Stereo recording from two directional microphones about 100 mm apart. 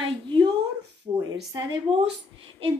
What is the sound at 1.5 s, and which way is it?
Speech, 55° right (ahead or behind).